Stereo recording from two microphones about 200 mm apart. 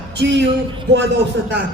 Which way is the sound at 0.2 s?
60° right (ahead or behind).